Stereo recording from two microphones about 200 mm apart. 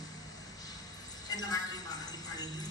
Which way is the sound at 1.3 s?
20° left (ahead or behind).